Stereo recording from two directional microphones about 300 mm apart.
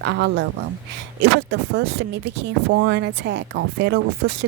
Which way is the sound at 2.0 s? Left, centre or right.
Right.